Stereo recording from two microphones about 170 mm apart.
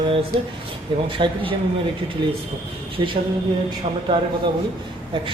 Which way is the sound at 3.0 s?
30° right (ahead or behind).